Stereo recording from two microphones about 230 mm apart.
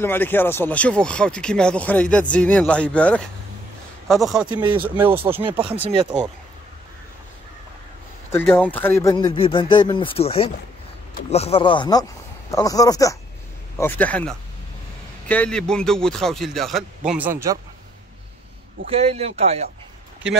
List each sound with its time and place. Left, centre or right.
0.0 s speech: centre
5.4 s speech: right
8.3 s speech: centre
18.9 s speech: right